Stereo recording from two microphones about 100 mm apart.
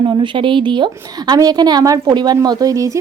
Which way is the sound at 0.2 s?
55° right (ahead or behind).